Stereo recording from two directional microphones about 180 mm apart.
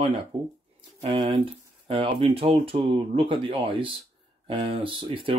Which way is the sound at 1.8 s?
30° right (ahead or behind).